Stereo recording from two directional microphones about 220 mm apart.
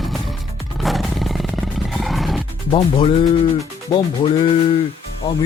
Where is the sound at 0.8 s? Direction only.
Centre (ahead or behind).